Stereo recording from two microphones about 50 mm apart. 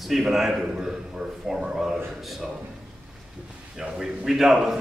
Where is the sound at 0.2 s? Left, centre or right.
Centre.